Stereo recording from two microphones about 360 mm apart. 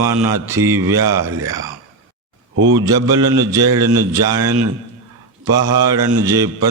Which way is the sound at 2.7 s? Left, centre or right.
Centre.